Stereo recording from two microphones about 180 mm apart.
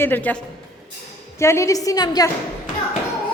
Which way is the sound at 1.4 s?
15° left (ahead or behind).